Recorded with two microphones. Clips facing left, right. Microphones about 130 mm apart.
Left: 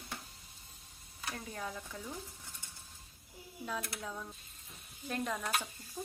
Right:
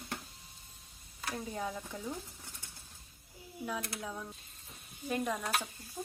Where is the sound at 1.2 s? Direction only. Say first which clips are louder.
Right 4 dB; 20° right (ahead or behind).